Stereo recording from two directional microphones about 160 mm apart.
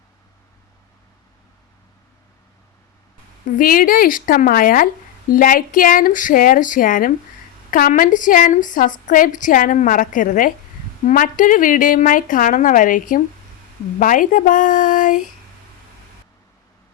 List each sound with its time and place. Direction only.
3.6 s a woman's voice: 60° left (ahead or behind)